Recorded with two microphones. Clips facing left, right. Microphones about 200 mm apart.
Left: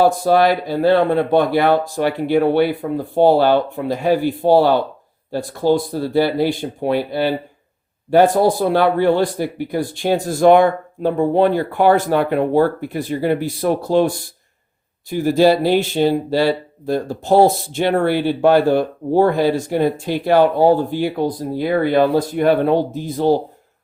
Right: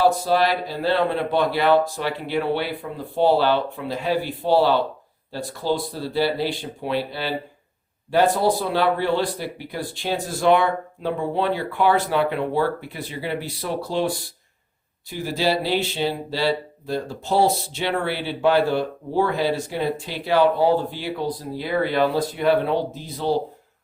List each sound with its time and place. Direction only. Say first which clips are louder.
0.0 s speech: left 5 dB; 50° left (ahead or behind)